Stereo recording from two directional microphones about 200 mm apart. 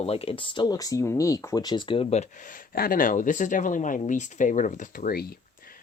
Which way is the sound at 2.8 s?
45° left (ahead or behind).